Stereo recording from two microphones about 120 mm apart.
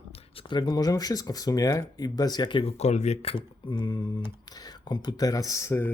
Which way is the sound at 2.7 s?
70° left (ahead or behind).